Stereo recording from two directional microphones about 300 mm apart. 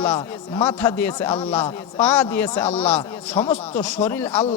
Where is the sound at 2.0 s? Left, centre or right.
Centre.